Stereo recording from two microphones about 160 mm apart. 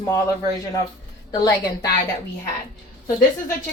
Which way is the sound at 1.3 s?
25° left (ahead or behind).